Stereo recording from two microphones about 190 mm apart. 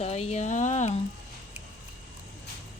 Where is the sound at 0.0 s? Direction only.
35° left (ahead or behind).